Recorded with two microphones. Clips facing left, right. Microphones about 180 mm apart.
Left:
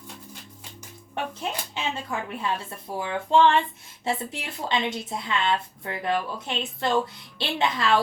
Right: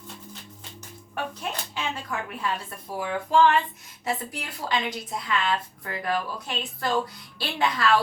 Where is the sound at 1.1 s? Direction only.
25° left (ahead or behind).